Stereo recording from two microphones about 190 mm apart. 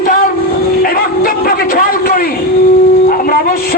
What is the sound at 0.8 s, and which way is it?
A man's voice, 50° left (ahead or behind).